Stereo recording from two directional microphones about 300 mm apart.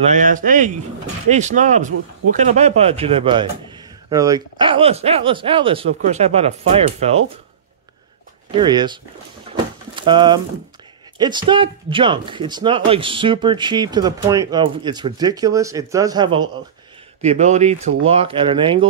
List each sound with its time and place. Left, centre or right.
0.2 s speech: right
8.5 s speech: centre